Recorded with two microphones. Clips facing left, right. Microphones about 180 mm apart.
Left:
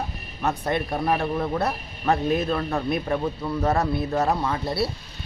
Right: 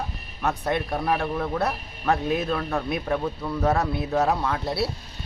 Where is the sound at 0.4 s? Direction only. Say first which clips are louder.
Left 1 dB; 5° left (ahead or behind).